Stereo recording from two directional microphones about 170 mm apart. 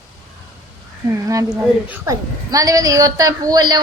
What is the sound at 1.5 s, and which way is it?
A woman's voice, 15° right (ahead or behind).